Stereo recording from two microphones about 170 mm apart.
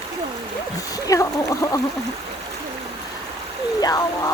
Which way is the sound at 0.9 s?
20° left (ahead or behind).